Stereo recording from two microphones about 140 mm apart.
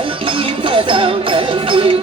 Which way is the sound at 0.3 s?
40° right (ahead or behind).